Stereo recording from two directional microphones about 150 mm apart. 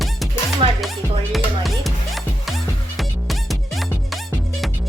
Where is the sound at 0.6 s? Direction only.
35° right (ahead or behind).